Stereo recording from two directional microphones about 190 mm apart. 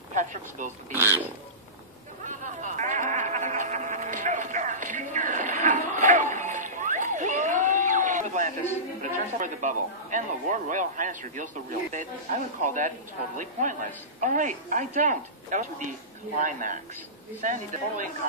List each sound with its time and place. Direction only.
0.1 s speech: 40° right (ahead or behind)
2.2 s a sound: 40° right (ahead or behind)
9.4 s a man's voice: 40° right (ahead or behind)